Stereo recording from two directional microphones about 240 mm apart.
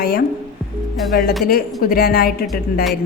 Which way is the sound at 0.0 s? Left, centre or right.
Left.